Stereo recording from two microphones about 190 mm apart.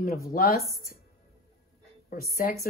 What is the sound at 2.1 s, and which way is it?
Speech, 50° left (ahead or behind).